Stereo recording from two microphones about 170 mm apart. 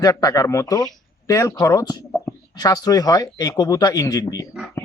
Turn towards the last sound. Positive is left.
turn(degrees=20)  # may be behind; listen again after turning